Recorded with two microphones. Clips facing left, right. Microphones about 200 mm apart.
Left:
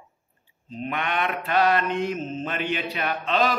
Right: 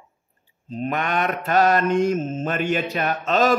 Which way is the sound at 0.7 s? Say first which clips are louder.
Right 4 dB; 40° right (ahead or behind).